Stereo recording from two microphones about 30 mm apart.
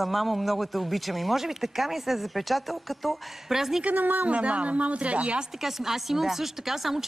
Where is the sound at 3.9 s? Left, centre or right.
Right.